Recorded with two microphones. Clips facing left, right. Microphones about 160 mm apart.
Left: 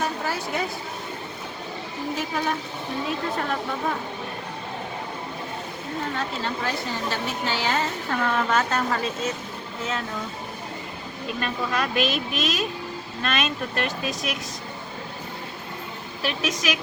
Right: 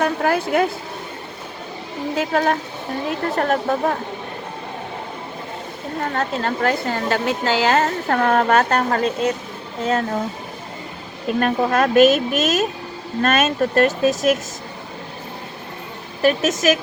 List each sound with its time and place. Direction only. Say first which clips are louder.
0.0 s a woman's voice: right 8 dB; 65° right (ahead or behind)
2.1 s a woman's voice: right 9 dB; 60° right (ahead or behind)
6.0 s a woman's voice: right 7 dB; 55° right (ahead or behind)
9.8 s speech: right 10 dB; 45° right (ahead or behind)
11.3 s speech: right 9 dB; 50° right (ahead or behind)
16.2 s speech: right 10 dB; 45° right (ahead or behind)